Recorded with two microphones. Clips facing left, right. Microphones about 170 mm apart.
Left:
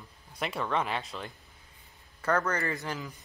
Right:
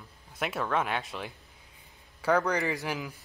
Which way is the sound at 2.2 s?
10° right (ahead or behind).